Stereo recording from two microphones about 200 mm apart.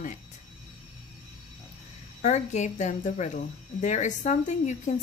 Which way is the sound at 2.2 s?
35° left (ahead or behind).